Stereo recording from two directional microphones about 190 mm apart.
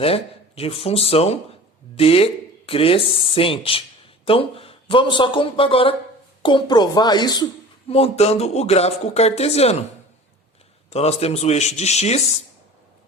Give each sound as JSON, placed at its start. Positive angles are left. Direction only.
{"t": 0.0, "sound": "speech", "side_deg": 30}
{"t": 10.8, "sound": "speech", "side_deg": 35}